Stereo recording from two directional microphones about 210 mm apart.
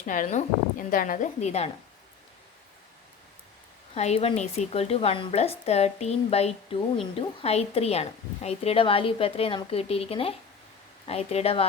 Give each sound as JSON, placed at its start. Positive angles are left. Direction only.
{"t": 0.0, "sound": "a woman's voice", "side_deg": 35}
{"t": 3.9, "sound": "a woman's voice", "side_deg": 30}